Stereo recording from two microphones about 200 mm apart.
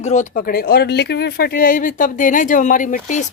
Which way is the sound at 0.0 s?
35° left (ahead or behind).